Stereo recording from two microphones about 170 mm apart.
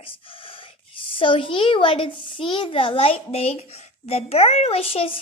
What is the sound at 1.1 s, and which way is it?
A child's voice, 30° left (ahead or behind).